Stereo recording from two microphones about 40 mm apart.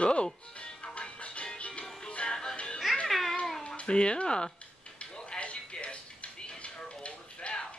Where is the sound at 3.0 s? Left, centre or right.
Centre.